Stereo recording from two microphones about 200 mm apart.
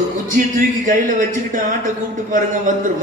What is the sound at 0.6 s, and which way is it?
A man's voice, 40° right (ahead or behind).